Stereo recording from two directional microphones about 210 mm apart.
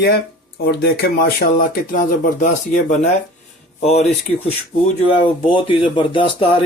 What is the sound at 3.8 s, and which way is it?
Speech, 30° left (ahead or behind).